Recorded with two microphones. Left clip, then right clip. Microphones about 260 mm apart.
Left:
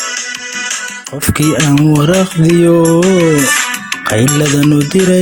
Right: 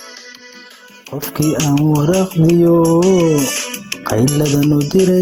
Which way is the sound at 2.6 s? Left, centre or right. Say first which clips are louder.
Left 3 dB; right.